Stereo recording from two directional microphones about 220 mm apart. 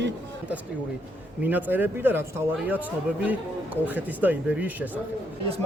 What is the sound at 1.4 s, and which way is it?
Speech, 5° right (ahead or behind).